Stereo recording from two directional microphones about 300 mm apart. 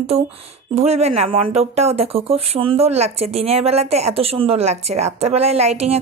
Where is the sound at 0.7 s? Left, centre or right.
Right.